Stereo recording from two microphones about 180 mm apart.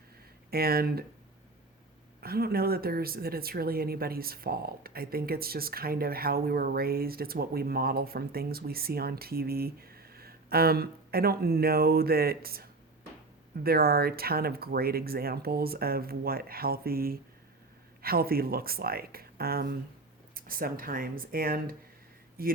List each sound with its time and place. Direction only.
0.5 s speech: 55° right (ahead or behind)
2.2 s speech: 55° right (ahead or behind)